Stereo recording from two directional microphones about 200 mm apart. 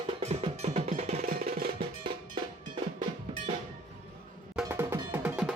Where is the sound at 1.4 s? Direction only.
45° right (ahead or behind).